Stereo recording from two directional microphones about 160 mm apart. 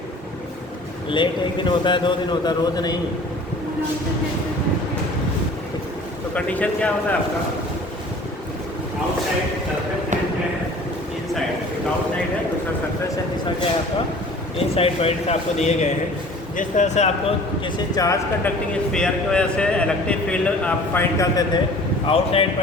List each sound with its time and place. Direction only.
1.1 s a man's voice: 30° left (ahead or behind)
6.3 s a man's voice: 10° left (ahead or behind)
14.8 s speech: 40° left (ahead or behind)
17.9 s a man's voice: 20° left (ahead or behind)
18.7 s a man's voice: 5° left (ahead or behind); by 21.6 s 20° left (ahead or behind)
22.0 s a man's voice: 35° left (ahead or behind)